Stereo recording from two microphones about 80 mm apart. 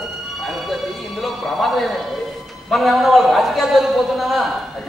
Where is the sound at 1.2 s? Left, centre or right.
Centre.